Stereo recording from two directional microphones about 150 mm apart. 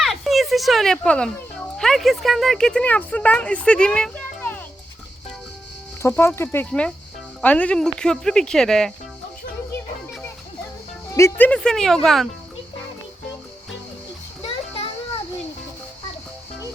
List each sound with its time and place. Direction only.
0.0 s speech: centre (ahead or behind)
6.0 s speech: 15° left (ahead or behind)
11.1 s speech: 15° left (ahead or behind)